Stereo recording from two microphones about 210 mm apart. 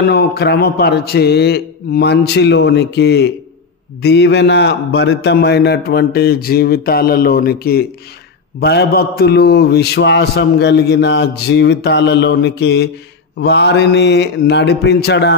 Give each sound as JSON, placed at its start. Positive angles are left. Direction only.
{"t": 0.0, "sound": "mantra", "side_deg": 50}